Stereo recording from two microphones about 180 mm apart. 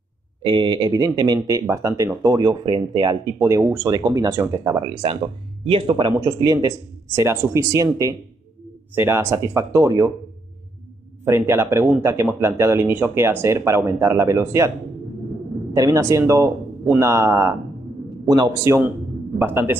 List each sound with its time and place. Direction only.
0.4 s a man's voice: 25° right (ahead or behind)
5.7 s a man's voice: 30° right (ahead or behind)
11.2 s speech: 15° right (ahead or behind)
15.7 s a man's voice: 20° right (ahead or behind)